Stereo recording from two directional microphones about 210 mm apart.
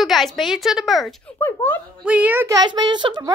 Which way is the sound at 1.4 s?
10° left (ahead or behind).